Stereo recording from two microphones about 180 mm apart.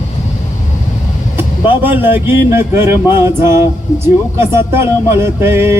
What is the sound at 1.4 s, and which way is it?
Speech, 10° right (ahead or behind).